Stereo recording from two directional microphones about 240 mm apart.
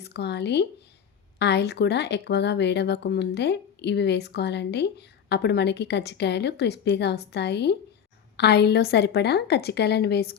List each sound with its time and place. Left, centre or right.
0.0 s speech: left